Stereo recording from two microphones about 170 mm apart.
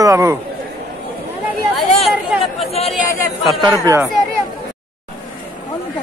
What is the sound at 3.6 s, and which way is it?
Speech, 20° right (ahead or behind).